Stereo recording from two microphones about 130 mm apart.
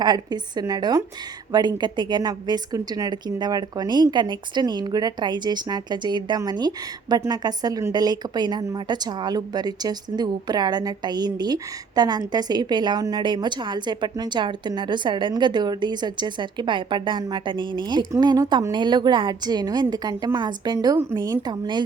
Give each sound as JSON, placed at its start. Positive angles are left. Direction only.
{"t": 0.0, "sound": "a woman's voice", "side_deg": -35}